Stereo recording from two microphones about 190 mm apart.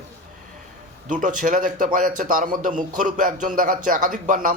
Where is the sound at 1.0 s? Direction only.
45° right (ahead or behind).